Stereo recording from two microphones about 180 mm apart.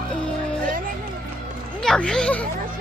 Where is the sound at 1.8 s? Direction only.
5° left (ahead or behind).